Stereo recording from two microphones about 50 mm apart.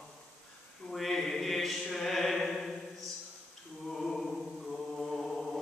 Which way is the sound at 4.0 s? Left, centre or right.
Centre.